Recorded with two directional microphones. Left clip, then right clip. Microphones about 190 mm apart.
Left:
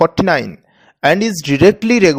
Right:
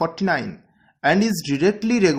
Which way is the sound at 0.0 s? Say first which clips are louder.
Left 9 dB; 50° left (ahead or behind).